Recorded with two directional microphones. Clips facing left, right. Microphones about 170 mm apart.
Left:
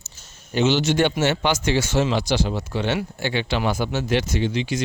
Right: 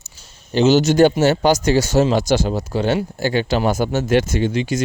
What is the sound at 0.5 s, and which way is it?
Speech, 40° right (ahead or behind).